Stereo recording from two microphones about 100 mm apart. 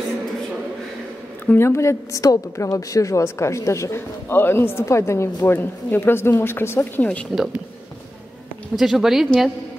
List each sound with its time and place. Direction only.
1.5 s a woman's voice: 25° left (ahead or behind)
8.7 s speech: 5° right (ahead or behind)